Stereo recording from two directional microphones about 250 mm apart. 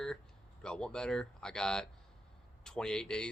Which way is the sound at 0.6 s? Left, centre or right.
Centre.